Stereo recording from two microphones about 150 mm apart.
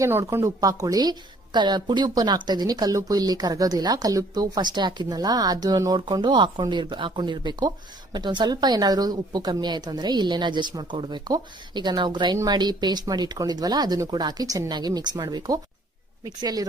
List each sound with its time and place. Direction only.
0.0 s a woman's voice: 20° right (ahead or behind)